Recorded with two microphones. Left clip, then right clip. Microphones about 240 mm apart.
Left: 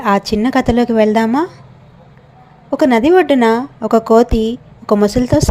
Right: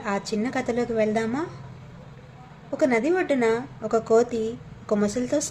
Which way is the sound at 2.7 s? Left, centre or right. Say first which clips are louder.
Left 11 dB; left.